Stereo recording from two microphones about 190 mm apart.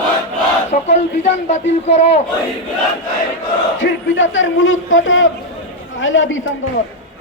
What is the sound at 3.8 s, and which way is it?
A man's voice, 85° left.